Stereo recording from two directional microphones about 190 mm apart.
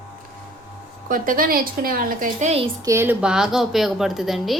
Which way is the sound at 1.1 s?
45° right (ahead or behind).